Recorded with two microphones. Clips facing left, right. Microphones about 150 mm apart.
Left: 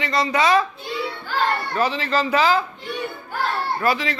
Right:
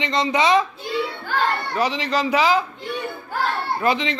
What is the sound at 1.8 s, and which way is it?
Speech, 15° right (ahead or behind).